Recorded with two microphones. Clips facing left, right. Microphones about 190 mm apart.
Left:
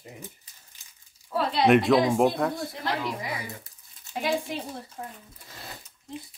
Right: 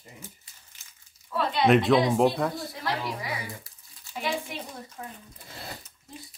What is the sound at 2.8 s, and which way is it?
Speech, 25° left (ahead or behind).